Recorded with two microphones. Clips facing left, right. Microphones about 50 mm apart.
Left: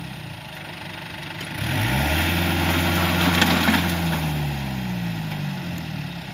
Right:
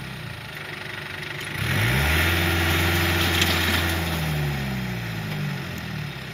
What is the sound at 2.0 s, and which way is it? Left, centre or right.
Vehicle, right.